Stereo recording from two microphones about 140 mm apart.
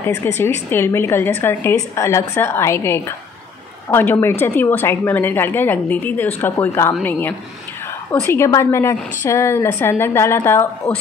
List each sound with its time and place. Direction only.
0.0 s a woman's voice: 15° left (ahead or behind)